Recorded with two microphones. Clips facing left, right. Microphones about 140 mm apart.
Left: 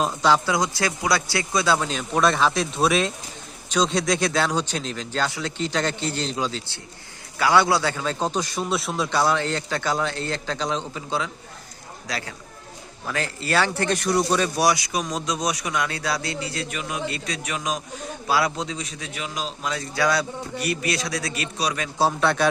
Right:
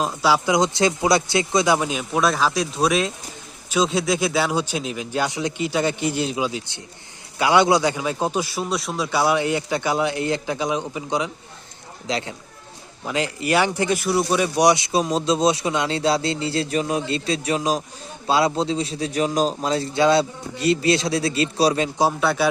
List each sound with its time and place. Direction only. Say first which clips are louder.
0.0 s speech: even; 5° right (ahead or behind)
9.2 s speech: right 3 dB; 15° right (ahead or behind); by 21.8 s 30° right (ahead or behind)
22.2 s a man's voice: right 1 dB; 5° right (ahead or behind)